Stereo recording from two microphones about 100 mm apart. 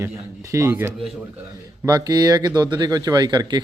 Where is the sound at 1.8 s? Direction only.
40° right (ahead or behind).